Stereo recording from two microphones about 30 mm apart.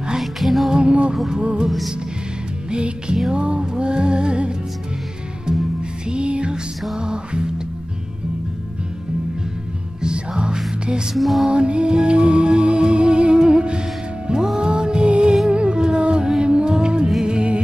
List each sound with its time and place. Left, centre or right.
0.2 s music: centre
0.7 s music: right
2.7 s music: right
6.0 s music: right
10.0 s music: right
11.1 s music: centre
11.4 s music: right